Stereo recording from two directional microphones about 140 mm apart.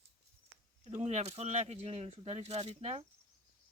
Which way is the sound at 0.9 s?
50° right (ahead or behind).